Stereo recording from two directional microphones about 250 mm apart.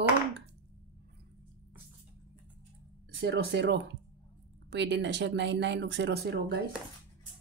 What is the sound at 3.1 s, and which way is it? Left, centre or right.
Speech, right.